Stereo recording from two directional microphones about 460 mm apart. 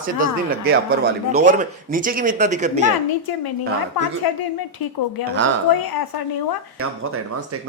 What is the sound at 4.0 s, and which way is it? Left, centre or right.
Speech, left.